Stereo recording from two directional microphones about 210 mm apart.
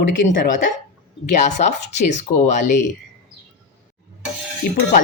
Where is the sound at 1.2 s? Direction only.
35° left (ahead or behind).